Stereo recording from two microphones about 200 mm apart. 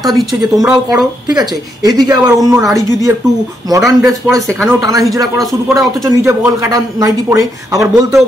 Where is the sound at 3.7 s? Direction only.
15° right (ahead or behind).